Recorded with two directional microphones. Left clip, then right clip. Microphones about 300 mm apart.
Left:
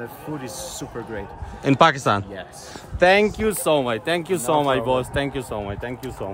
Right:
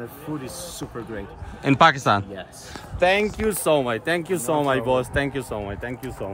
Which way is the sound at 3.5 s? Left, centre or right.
Centre.